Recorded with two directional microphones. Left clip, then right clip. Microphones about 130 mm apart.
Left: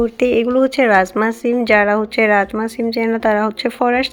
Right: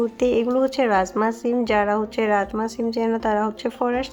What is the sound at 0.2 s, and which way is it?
Speech, 15° left (ahead or behind).